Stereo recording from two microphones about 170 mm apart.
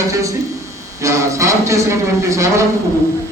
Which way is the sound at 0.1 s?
20° right (ahead or behind).